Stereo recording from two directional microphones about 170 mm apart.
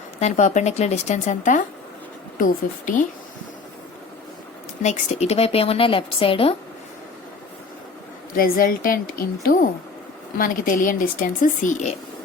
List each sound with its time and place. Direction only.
0.2 s speech: 45° left (ahead or behind)
4.8 s a woman's voice: 40° left (ahead or behind)
8.4 s a woman's voice: 55° left (ahead or behind)